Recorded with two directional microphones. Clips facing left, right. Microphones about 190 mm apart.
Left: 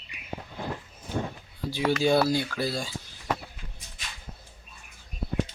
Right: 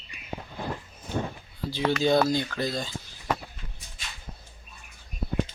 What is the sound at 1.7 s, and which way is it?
Speech, 10° left (ahead or behind).